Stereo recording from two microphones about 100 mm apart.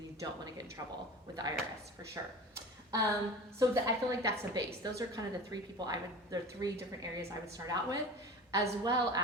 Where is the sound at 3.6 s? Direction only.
35° right (ahead or behind).